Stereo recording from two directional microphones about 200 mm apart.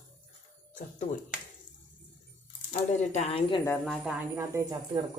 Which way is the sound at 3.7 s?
Centre (ahead or behind).